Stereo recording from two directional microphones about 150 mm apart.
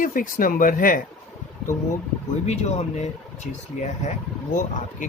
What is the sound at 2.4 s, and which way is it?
Speech, 45° left (ahead or behind).